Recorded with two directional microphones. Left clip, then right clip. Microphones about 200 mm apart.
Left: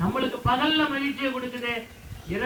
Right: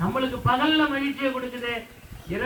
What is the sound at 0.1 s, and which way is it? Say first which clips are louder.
A man's voice: right 1 dB; 25° left (ahead or behind).